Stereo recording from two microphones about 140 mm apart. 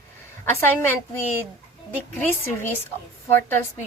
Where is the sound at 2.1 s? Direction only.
15° left (ahead or behind).